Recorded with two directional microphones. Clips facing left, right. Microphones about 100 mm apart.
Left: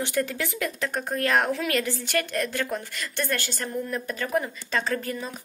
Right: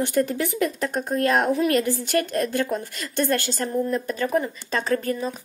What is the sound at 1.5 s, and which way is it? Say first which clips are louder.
A woman's voice: right 6 dB; 35° right (ahead or behind).